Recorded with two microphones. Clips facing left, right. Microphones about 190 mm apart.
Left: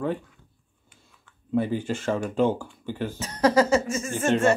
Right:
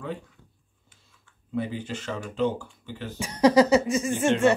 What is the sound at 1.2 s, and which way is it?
Speech, 50° left (ahead or behind).